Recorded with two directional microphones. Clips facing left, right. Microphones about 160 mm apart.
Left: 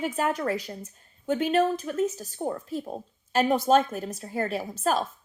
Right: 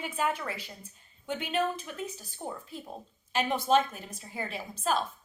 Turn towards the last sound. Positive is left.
turn(degrees=45)  # may be behind; listen again after turning